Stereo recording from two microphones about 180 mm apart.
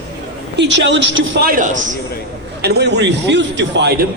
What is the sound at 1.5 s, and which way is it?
Speech, 45° right (ahead or behind).